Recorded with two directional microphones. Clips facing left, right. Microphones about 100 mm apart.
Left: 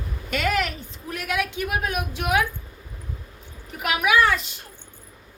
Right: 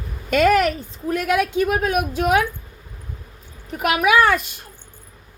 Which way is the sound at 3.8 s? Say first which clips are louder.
Right 4 dB; 45° right (ahead or behind).